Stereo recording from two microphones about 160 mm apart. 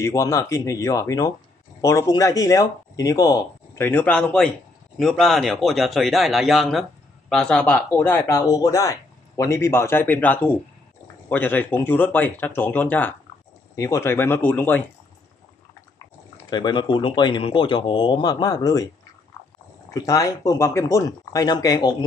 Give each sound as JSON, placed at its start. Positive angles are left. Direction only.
{"t": 0.0, "sound": "a man's voice", "side_deg": 20}
{"t": 16.4, "sound": "speech", "side_deg": 25}
{"t": 19.9, "sound": "speech", "side_deg": 20}